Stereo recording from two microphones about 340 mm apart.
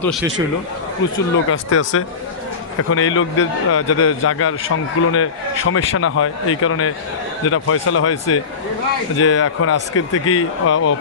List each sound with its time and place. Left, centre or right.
0.0 s speech: centre
1.5 s a man's voice: left